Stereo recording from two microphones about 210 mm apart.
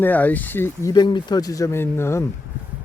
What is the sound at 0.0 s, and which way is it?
Speech, 10° left (ahead or behind).